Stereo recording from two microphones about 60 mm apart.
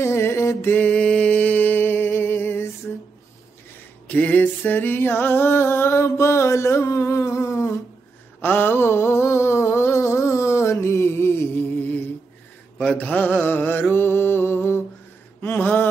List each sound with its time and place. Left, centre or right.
0.0 s music: left
0.7 s a sound: left
4.1 s music: left
8.4 s a sound: left
12.9 s mantra: left
15.4 s mantra: left